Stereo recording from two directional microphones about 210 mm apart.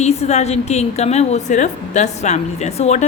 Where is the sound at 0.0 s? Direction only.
30° left (ahead or behind).